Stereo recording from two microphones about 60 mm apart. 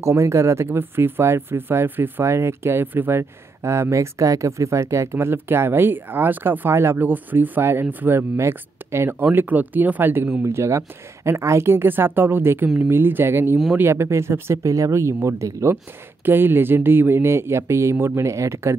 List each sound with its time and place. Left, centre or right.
0.0 s speech: right
0.7 s speech: right
2.2 s speech: right
3.6 s speech: right
6.7 s speech: right
7.0 s speech: right
8.4 s speech: right
9.2 s speech: right
10.4 s speech: right
16.3 s speech: right